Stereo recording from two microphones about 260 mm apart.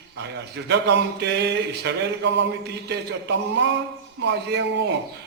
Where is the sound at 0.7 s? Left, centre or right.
Right.